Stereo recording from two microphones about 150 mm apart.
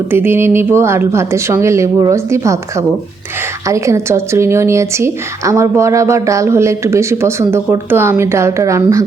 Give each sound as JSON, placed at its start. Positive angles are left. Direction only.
{"t": 0.1, "sound": "a woman's voice", "side_deg": -15}